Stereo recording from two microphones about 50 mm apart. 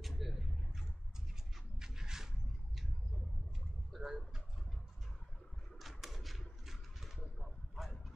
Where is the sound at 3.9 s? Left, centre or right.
Centre.